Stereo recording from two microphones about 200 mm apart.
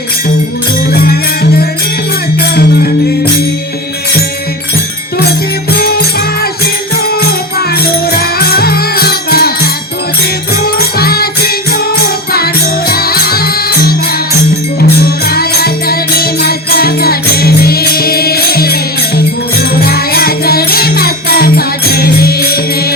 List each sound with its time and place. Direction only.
1.0 s music: 50° left (ahead or behind)
5.7 s music: 50° left (ahead or behind)
8.2 s music: 50° left (ahead or behind)
10.8 s music: 50° left (ahead or behind)
12.9 s music: 50° left (ahead or behind)
14.9 s music: 50° left (ahead or behind)